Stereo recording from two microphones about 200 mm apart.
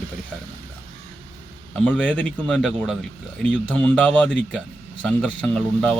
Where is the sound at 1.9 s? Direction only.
5° left (ahead or behind).